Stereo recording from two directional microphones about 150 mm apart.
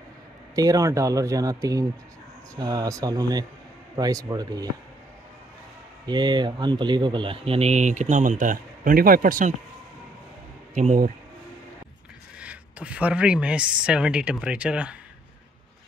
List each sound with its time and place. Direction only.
0.6 s speech: 25° right (ahead or behind)
6.0 s speech: 30° right (ahead or behind); by 9.5 s 65° right (ahead or behind)
10.7 s speech: 55° right (ahead or behind)
12.4 s speech: 10° right (ahead or behind)